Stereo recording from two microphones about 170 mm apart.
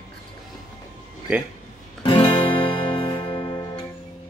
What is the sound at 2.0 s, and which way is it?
Music, 30° left (ahead or behind).